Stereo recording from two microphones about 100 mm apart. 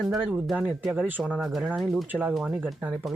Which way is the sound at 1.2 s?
5° right (ahead or behind).